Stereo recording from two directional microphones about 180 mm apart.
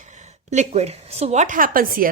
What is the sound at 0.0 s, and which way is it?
A woman's voice, 40° right (ahead or behind).